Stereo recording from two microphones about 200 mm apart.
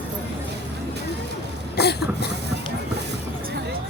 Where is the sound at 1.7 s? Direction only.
55° left (ahead or behind).